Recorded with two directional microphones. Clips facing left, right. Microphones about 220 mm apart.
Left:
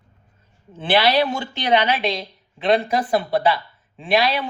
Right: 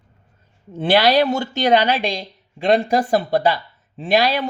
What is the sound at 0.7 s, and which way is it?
Speech, 40° right (ahead or behind).